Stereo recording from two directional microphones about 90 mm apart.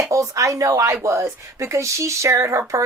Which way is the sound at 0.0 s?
35° right (ahead or behind).